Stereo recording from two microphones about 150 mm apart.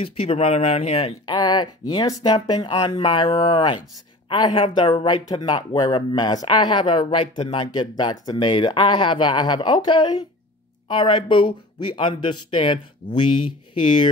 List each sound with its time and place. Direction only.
0.0 s speech: 40° left (ahead or behind)
1.2 s speech: 30° left (ahead or behind)